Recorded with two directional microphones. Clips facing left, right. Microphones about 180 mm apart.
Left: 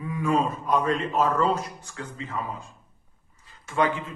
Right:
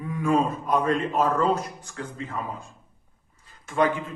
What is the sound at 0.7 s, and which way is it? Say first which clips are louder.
Speech: right 1 dB; 50° right (ahead or behind).